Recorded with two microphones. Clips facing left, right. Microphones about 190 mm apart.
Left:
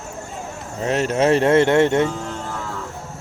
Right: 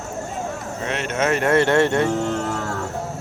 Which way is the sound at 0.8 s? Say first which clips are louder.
Left 5 dB; 40° left (ahead or behind).